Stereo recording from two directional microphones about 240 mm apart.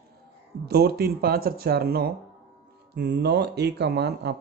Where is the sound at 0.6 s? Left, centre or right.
Right.